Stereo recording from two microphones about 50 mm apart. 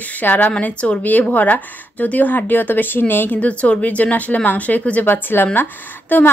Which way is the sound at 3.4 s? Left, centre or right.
Left.